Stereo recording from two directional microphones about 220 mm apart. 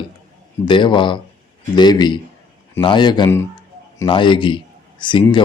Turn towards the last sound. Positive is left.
turn(degrees=20)  # may be behind; listen again after turning